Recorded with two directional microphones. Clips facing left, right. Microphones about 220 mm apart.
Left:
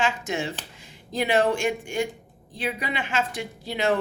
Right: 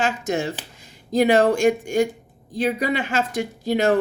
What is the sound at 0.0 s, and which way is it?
Speech, 40° right (ahead or behind).